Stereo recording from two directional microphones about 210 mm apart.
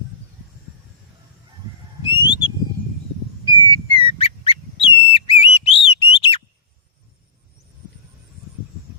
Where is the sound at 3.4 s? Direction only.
20° left (ahead or behind).